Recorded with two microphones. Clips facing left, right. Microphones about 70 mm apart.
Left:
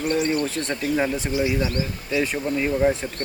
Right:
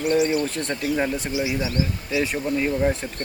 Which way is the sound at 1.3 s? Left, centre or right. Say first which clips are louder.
Left 2 dB; centre.